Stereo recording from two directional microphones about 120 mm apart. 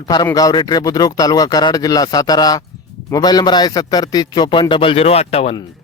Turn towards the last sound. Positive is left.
turn(degrees=60)  # may be behind; listen again after turning